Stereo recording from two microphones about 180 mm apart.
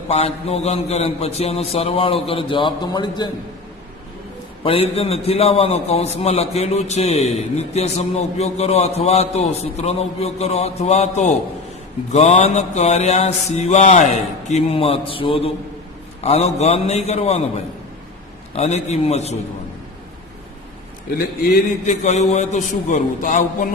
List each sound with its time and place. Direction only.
0.1 s a man's voice: 35° left (ahead or behind)
4.6 s a man's voice: 30° left (ahead or behind)
18.5 s a man's voice: 35° left (ahead or behind)
21.8 s a man's voice: 40° left (ahead or behind)